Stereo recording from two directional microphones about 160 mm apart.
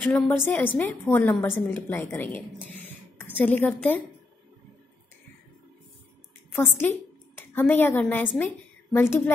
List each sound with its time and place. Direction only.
0.0 s a woman's voice: 10° left (ahead or behind)
6.5 s a woman's voice: 15° left (ahead or behind)